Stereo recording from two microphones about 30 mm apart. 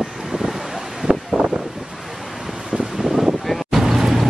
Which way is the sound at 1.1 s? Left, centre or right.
Centre.